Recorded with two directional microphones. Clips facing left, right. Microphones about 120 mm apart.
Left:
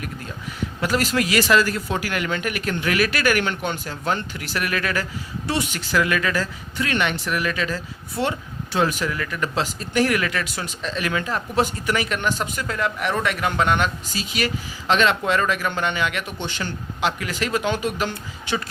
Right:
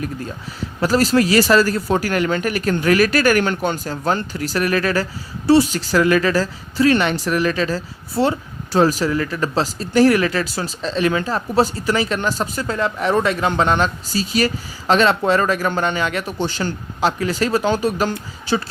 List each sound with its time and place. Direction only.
0.8 s speech: 35° right (ahead or behind)